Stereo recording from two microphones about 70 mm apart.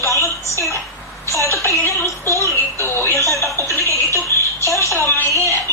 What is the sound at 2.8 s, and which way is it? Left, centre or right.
Speech, left.